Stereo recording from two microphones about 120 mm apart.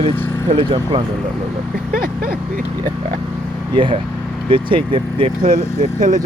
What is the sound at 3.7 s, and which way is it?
Speech, 45° right (ahead or behind).